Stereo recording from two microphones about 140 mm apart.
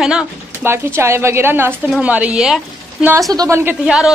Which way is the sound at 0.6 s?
15° right (ahead or behind).